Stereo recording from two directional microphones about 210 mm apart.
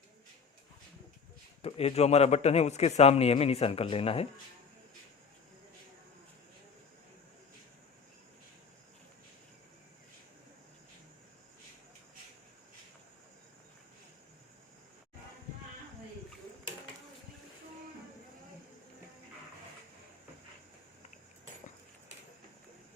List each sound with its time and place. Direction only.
1.6 s a man's voice: 30° left (ahead or behind)